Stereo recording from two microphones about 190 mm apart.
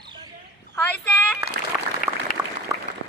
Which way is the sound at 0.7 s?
10° left (ahead or behind).